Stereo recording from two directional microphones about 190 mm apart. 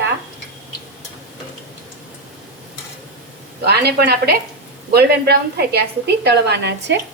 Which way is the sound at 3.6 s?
60° right (ahead or behind).